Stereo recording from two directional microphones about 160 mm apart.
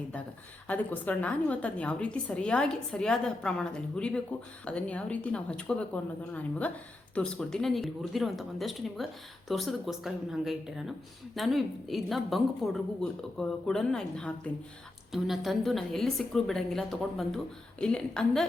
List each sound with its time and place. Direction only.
0.7 s a woman's voice: 10° left (ahead or behind)